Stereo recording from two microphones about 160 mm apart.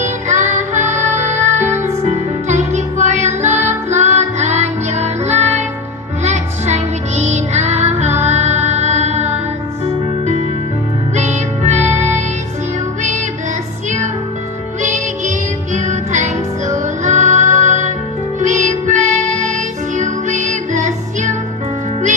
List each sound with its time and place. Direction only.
0.0 s music: 50° right (ahead or behind)
11.1 s music: 45° right (ahead or behind)
14.8 s music: 50° right (ahead or behind)